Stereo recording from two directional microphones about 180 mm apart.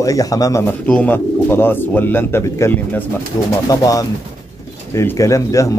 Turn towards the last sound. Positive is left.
turn(degrees=15)  # may be behind; listen again after turning